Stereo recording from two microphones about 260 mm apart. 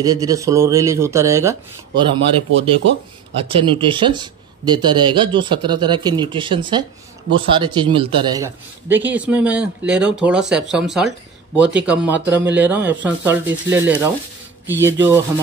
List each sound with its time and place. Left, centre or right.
0.0 s speech: centre
3.4 s a man's voice: right